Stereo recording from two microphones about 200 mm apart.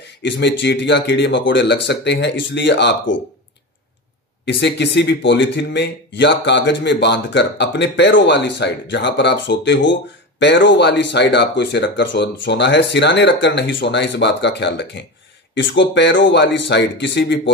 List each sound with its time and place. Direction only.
0.2 s speech: 65° left (ahead or behind)
4.5 s speech: 60° left (ahead or behind)